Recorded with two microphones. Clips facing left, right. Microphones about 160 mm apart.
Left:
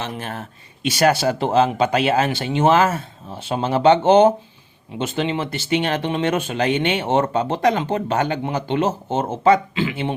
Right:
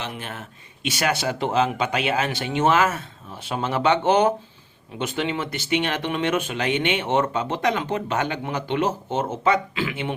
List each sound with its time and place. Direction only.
0.0 s speech: 40° left (ahead or behind)